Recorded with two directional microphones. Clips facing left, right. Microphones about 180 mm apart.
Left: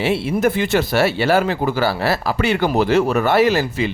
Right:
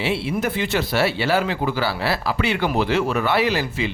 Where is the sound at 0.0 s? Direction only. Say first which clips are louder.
Left 5 dB; 45° left (ahead or behind).